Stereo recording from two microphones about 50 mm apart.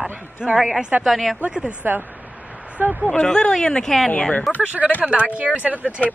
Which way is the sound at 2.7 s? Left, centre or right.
Right.